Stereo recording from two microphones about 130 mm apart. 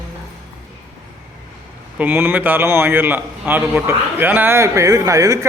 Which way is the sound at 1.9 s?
15° right (ahead or behind).